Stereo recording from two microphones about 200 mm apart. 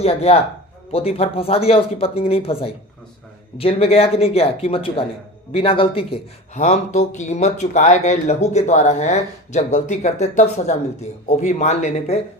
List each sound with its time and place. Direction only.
0.0 s speech: 30° left (ahead or behind)